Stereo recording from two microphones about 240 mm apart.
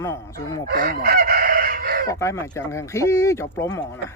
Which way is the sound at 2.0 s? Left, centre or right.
Centre.